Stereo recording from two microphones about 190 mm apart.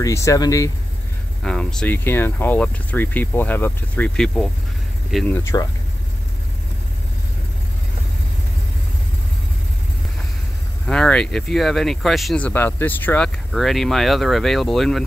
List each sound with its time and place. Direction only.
0.0 s speech: 15° left (ahead or behind)
1.4 s speech: 5° left (ahead or behind)
10.9 s speech: 5° left (ahead or behind)